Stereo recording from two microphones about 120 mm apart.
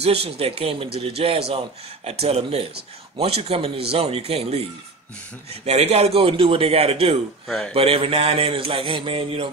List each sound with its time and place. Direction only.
0.0 s speech: 55° right (ahead or behind)
7.4 s speech: 5° left (ahead or behind)
7.7 s speech: 55° right (ahead or behind)